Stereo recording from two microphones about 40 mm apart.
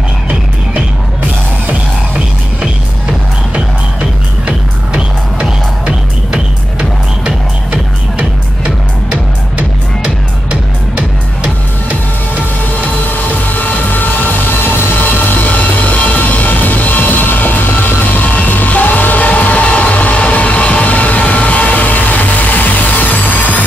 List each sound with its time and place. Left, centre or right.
3.5 s music: right
9.1 s music: right
13.6 s vehicle: left
15.0 s a sound: left